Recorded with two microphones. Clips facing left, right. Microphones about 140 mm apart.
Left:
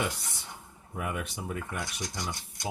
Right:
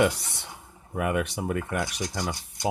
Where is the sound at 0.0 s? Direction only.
70° right (ahead or behind).